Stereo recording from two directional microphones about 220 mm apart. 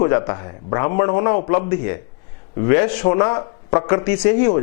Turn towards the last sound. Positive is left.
turn(degrees=15)  # may be behind; listen again after turning